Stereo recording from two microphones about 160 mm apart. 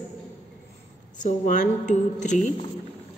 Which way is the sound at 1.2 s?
50° left (ahead or behind).